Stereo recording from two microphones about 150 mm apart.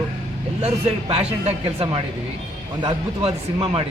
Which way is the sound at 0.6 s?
40° right (ahead or behind).